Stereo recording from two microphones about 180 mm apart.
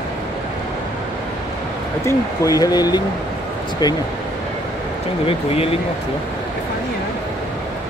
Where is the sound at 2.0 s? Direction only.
20° left (ahead or behind).